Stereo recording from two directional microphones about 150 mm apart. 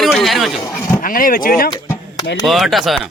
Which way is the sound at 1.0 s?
65° left (ahead or behind).